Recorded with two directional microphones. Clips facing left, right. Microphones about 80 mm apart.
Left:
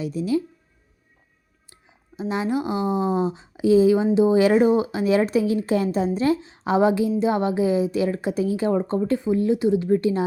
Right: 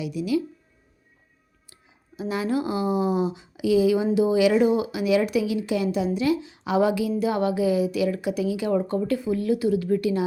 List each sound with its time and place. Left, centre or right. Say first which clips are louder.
0.0 s speech: left 2 dB; left
1.7 s a woman's voice: left 2 dB; left